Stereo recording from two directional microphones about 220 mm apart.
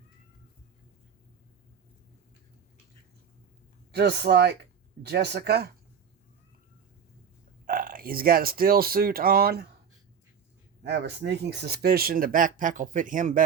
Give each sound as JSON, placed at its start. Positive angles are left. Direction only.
{"t": 3.9, "sound": "speech", "side_deg": -50}
{"t": 7.6, "sound": "speech", "side_deg": -40}
{"t": 10.8, "sound": "speech", "side_deg": -50}